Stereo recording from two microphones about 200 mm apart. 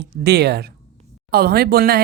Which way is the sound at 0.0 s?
55° right (ahead or behind).